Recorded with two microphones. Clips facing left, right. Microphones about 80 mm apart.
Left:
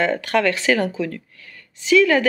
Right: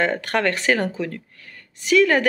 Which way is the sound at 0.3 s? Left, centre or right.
Right.